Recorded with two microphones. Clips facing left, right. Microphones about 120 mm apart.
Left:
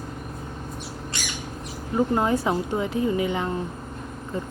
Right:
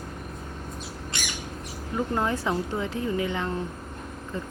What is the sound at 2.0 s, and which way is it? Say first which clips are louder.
Speech: left 5 dB; 20° left (ahead or behind).